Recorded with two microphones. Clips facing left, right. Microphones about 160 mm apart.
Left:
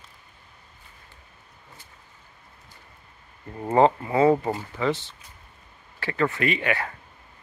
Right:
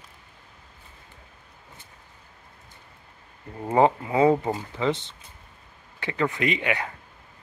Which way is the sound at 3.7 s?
15° right (ahead or behind).